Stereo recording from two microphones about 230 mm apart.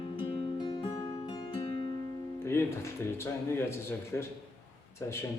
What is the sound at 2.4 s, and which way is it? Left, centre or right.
Music, centre.